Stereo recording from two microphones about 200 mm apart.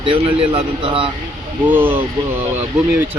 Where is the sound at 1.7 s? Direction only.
10° right (ahead or behind).